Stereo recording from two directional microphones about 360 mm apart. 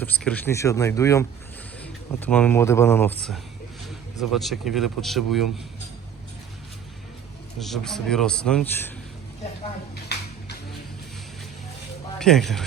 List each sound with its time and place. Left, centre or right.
0.0 s speech: centre
7.6 s speech: centre
12.2 s speech: centre